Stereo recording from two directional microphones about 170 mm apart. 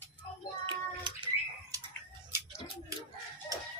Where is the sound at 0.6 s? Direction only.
25° right (ahead or behind).